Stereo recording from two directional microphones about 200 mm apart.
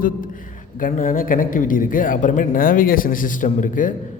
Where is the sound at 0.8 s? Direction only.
45° left (ahead or behind).